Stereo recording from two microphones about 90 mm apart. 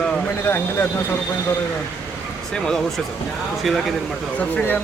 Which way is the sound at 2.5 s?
10° left (ahead or behind).